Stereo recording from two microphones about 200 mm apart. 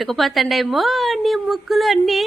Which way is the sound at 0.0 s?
Centre (ahead or behind).